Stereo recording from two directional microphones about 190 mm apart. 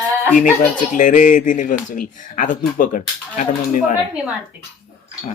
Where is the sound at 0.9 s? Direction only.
45° left (ahead or behind).